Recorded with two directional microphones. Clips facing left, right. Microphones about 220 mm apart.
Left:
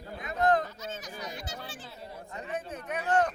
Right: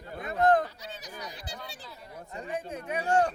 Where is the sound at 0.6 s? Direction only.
35° right (ahead or behind).